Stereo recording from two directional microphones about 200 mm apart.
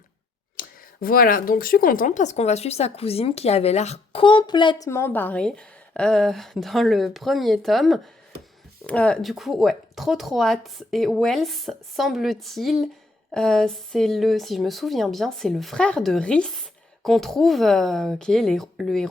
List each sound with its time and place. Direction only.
0.6 s a sound: 45° left (ahead or behind)
1.0 s speech: 45° left (ahead or behind); by 4.9 s 25° left (ahead or behind)
4.9 s speech: 10° left (ahead or behind)